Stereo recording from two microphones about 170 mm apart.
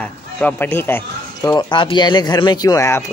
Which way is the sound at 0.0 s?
10° left (ahead or behind).